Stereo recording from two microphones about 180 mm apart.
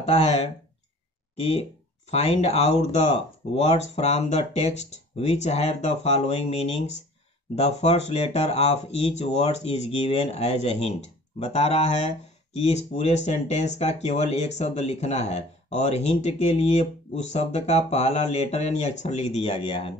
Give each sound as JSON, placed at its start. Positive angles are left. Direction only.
{"t": 0.0, "sound": "speech", "side_deg": 35}
{"t": 1.5, "sound": "speech", "side_deg": 35}